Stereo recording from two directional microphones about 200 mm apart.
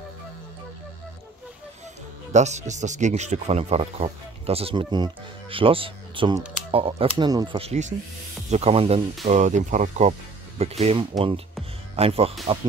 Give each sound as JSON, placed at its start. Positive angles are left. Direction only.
{"t": 2.3, "sound": "speech", "side_deg": -35}